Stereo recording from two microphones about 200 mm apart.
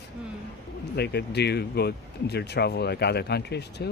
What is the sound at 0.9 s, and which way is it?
Speech, 55° left (ahead or behind).